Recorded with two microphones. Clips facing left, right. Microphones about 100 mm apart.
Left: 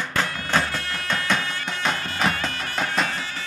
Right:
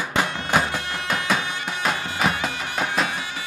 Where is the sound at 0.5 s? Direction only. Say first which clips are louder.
Right 2 dB; 15° right (ahead or behind).